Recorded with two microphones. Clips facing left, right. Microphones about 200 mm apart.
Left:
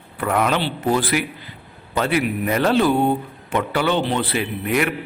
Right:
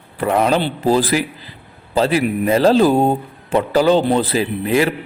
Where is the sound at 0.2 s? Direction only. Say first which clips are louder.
Right 4 dB; 30° right (ahead or behind).